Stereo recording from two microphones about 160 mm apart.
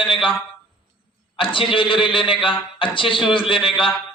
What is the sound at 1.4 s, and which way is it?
A man's voice, 35° left (ahead or behind).